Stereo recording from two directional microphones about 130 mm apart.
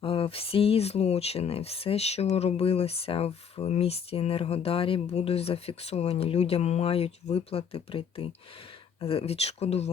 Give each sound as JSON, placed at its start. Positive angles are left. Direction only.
{"t": 0.0, "sound": "speech", "side_deg": 45}